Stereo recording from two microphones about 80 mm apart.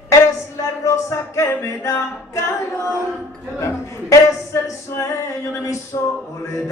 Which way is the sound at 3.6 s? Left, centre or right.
Left.